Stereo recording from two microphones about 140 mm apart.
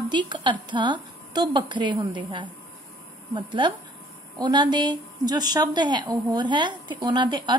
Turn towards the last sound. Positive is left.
turn(degrees=-30)  # may be behind; listen again after turning